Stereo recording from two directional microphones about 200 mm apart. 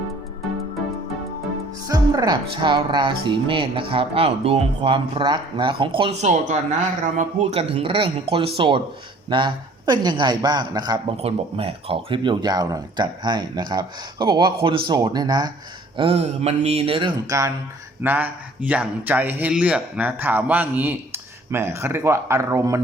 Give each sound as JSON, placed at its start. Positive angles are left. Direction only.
{"t": 1.9, "sound": "a woman's voice", "side_deg": -20}